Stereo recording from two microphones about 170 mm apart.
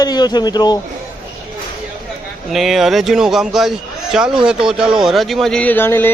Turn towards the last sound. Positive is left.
turn(degrees=15)  # may be behind; listen again after turning